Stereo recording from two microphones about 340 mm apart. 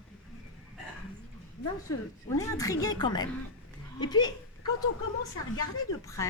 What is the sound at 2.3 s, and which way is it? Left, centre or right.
A woman's voice, centre.